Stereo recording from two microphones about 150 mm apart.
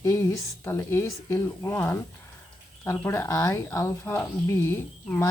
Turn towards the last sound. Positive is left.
turn(degrees=15)  # may be behind; listen again after turning